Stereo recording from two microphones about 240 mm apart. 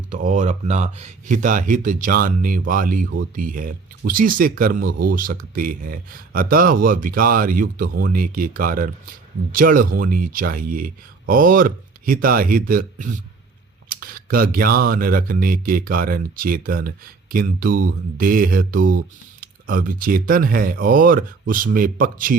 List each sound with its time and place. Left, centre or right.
0.1 s speech: right